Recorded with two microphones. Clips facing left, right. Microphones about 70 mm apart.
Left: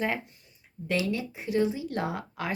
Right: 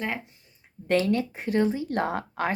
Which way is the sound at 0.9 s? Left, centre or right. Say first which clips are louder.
Right 6 dB; right.